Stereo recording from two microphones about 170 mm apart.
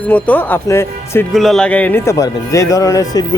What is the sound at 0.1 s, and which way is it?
Speech, 10° left (ahead or behind).